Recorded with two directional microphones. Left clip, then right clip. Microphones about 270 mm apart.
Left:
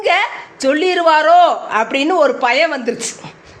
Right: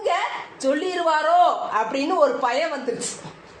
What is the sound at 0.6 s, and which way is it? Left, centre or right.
A woman's voice, left.